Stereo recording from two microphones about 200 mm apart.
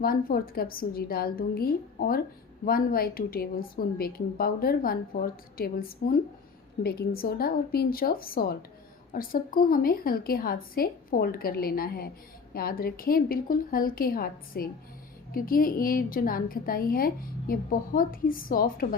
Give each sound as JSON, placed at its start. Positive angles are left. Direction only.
{"t": 0.0, "sound": "a woman's voice", "side_deg": 45}